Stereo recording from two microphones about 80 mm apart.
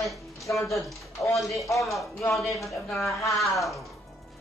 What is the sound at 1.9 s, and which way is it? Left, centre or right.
Speech, centre.